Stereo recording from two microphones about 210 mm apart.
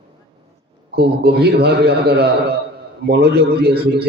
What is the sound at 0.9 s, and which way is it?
A man's voice, 50° right (ahead or behind).